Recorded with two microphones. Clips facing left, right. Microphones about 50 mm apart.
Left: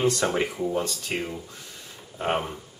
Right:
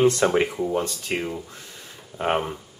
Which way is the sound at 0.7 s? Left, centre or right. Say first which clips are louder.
Right 2 dB; centre.